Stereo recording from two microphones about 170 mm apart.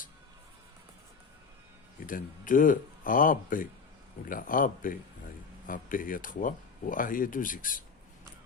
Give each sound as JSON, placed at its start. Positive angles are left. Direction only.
{"t": 2.0, "sound": "speech", "side_deg": 55}